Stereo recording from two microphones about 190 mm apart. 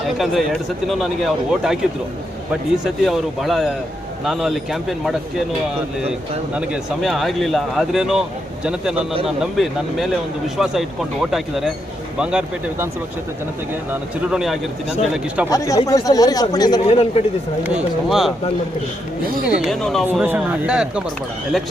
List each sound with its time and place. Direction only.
0.0 s speech: centre (ahead or behind)
6.5 s speech: 5° right (ahead or behind)
13.9 s speech: 5° right (ahead or behind)
15.4 s speech: 20° left (ahead or behind)
16.9 s a man's voice: 30° left (ahead or behind)
17.6 s speech: 5° right (ahead or behind)
19.5 s speech: centre (ahead or behind)
20.1 s speech: 10° right (ahead or behind)